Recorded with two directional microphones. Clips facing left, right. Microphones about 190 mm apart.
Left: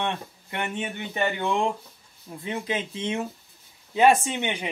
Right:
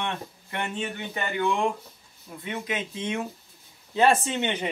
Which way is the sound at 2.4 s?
30° left (ahead or behind).